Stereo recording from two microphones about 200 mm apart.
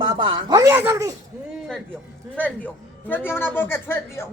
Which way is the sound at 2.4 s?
10° left (ahead or behind).